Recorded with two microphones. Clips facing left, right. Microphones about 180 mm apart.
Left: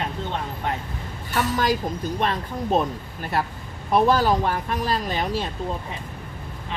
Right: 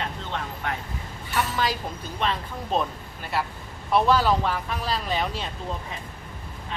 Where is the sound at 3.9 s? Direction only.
45° left (ahead or behind).